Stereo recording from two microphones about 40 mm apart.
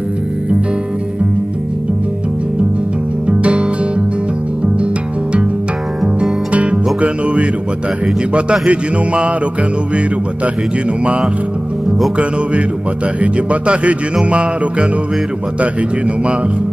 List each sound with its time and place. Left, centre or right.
3.3 s music: right
6.5 s music: right
13.2 s speech: right
14.3 s music: right